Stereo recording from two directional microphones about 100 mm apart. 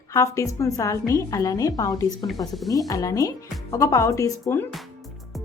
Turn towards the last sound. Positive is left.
turn(degrees=35)  # may be behind; listen again after turning